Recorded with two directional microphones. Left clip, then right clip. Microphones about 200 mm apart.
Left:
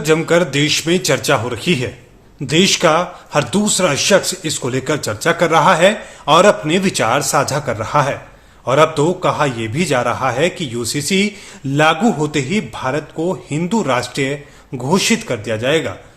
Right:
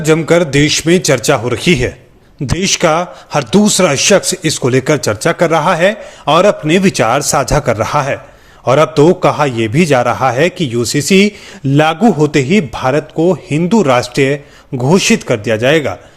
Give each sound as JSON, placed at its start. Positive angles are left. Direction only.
{"t": 0.0, "sound": "a man's voice", "side_deg": -25}